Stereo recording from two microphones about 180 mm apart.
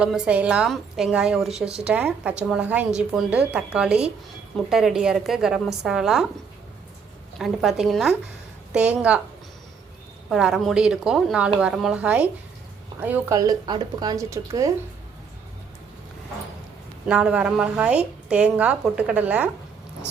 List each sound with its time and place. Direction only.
0.0 s a woman's voice: 5° right (ahead or behind)
7.3 s a woman's voice: centre (ahead or behind)
10.2 s a woman's voice: centre (ahead or behind); by 14.7 s 15° right (ahead or behind)
17.1 s a woman's voice: 5° right (ahead or behind)